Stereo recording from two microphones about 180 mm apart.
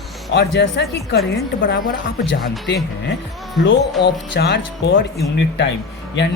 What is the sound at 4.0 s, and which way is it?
Speech, 70° left (ahead or behind).